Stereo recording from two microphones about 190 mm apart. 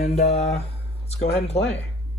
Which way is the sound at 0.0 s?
35° left (ahead or behind).